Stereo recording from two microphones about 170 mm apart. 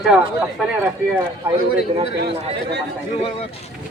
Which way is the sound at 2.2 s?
75° right (ahead or behind).